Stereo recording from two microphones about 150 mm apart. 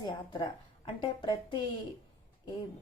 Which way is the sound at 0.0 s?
30° left (ahead or behind).